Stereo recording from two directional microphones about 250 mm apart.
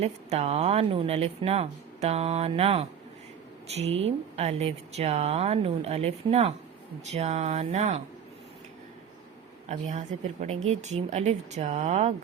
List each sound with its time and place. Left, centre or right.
0.0 s speech: right
9.6 s speech: right